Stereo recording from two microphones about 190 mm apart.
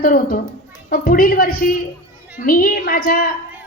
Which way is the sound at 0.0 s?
50° left (ahead or behind).